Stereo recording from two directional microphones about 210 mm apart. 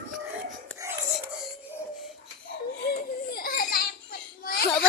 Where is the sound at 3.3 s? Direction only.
45° left (ahead or behind).